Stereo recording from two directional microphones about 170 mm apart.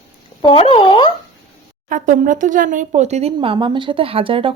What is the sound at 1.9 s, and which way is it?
Speech, 50° right (ahead or behind).